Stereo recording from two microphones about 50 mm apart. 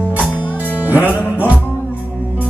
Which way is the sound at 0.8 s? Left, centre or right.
Right.